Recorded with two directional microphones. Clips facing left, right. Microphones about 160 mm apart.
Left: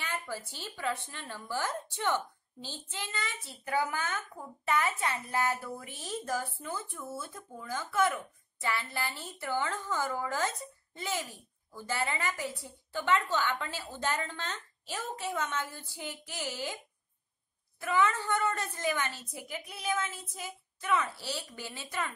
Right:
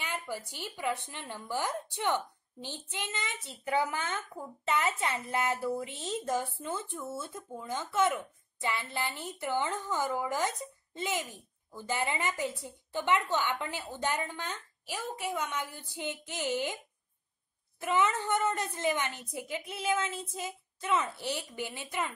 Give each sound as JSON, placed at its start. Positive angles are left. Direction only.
{"t": 0.0, "sound": "a woman's voice", "side_deg": -15}